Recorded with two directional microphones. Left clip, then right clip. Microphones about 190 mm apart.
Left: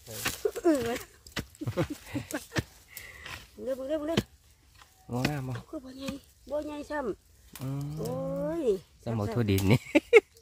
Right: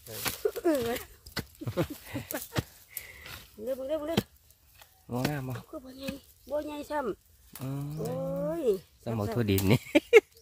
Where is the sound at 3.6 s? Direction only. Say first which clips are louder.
Even; 15° left (ahead or behind).